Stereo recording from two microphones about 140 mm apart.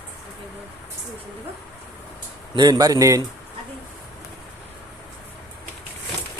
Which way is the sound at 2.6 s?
30° right (ahead or behind).